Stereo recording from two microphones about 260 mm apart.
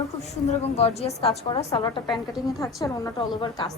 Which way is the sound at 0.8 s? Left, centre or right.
Left.